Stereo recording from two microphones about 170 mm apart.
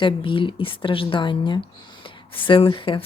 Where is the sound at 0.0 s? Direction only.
30° left (ahead or behind).